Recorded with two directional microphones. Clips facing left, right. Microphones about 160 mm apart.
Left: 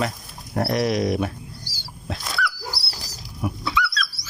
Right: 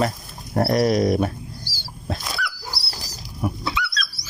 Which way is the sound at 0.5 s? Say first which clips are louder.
Right 3 dB; 40° right (ahead or behind).